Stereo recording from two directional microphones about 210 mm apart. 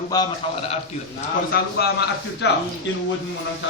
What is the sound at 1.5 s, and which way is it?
A man's voice, 50° left (ahead or behind).